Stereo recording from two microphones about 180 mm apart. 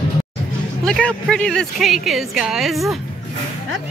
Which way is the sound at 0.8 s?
5° left (ahead or behind).